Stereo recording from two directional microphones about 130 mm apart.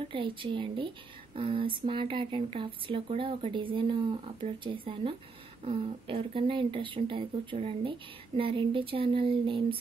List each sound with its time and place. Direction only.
0.1 s speech: 40° right (ahead or behind)